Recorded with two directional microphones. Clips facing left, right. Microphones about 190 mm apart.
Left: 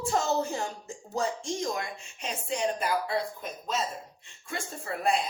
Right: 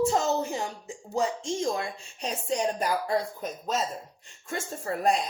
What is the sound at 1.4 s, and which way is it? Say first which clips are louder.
Speech: right 3 dB; 30° right (ahead or behind).